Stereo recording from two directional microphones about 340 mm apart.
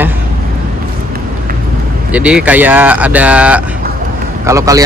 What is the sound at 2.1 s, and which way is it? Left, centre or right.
Speech, centre.